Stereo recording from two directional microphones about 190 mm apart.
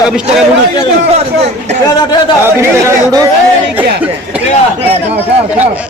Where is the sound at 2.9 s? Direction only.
20° right (ahead or behind).